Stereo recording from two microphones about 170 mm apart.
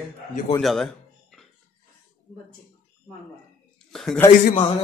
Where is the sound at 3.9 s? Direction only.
Centre (ahead or behind).